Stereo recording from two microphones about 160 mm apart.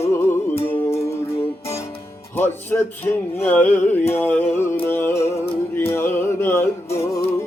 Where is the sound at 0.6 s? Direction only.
15° left (ahead or behind).